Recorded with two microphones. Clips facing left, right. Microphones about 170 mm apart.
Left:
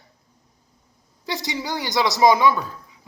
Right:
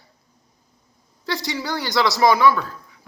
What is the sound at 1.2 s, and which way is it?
Speech, 20° left (ahead or behind).